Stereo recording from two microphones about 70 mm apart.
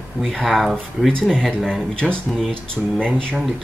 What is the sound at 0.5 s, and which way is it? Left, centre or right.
Speech, centre.